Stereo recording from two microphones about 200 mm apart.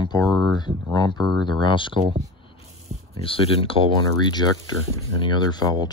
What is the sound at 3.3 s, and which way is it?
Speech, 25° left (ahead or behind).